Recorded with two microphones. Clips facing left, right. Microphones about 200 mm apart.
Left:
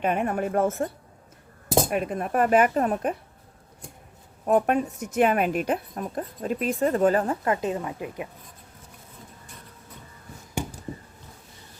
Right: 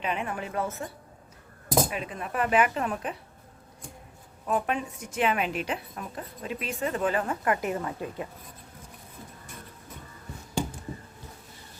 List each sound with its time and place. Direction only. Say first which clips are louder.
0.0 s speech: left 7 dB; 50° left (ahead or behind)
1.9 s speech: left 8 dB; 50° left (ahead or behind)
4.4 s speech: left 7 dB; 50° left (ahead or behind)
7.4 s a woman's voice: left 2 dB; 25° left (ahead or behind)